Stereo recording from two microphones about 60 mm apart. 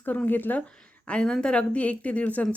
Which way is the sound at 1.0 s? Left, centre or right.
Centre.